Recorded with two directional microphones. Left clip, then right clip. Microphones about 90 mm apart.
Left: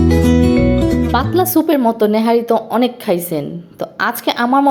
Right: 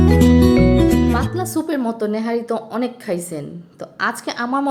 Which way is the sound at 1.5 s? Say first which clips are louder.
Left 8 dB; 25° left (ahead or behind).